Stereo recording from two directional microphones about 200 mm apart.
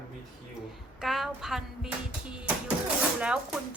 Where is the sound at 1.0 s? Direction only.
Centre (ahead or behind).